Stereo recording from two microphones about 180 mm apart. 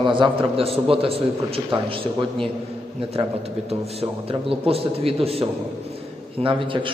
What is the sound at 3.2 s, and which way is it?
A man's voice, 30° right (ahead or behind).